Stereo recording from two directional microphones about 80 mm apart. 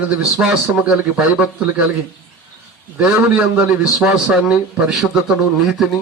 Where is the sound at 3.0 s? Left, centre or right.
Centre.